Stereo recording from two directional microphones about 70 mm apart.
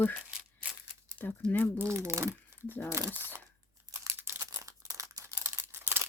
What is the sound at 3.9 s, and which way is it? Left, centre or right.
Crumpling, right.